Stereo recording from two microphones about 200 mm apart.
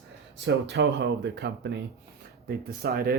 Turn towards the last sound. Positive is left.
turn(degrees=-50)  # may be behind; listen again after turning